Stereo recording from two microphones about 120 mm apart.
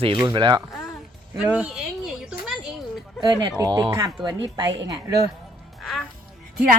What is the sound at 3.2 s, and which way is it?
Speech, 35° right (ahead or behind).